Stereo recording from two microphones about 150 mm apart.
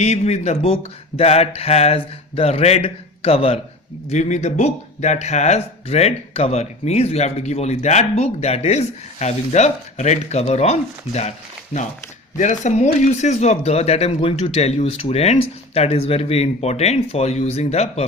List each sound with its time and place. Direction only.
0.0 s speech: 45° left (ahead or behind)
4.1 s speech: 50° left (ahead or behind)